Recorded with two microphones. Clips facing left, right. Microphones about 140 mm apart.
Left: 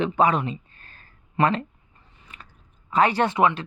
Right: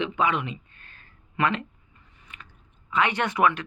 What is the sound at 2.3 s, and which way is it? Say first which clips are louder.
Chewing: left 1 dB; 35° left (ahead or behind).